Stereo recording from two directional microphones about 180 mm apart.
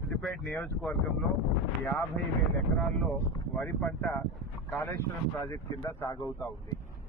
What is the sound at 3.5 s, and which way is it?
Speech, 5° left (ahead or behind).